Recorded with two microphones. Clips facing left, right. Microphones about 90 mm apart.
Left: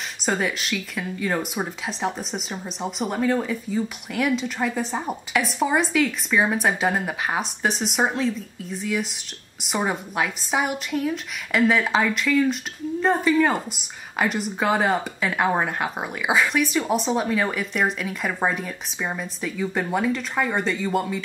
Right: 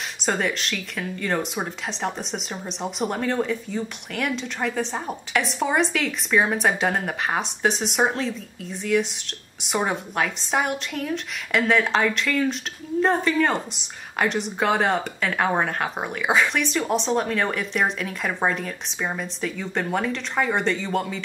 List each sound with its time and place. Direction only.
0.2 s speech: 5° left (ahead or behind)